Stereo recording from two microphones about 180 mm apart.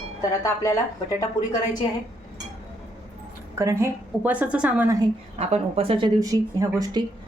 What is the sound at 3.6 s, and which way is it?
A woman's voice, 15° right (ahead or behind).